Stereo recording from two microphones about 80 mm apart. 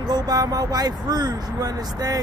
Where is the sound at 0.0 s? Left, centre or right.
Right.